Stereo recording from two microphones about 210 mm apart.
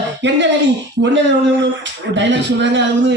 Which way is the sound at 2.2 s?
60° right (ahead or behind).